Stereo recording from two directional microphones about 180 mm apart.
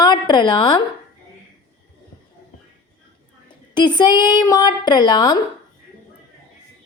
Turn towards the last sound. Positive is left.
turn(degrees=25)  # may be behind; listen again after turning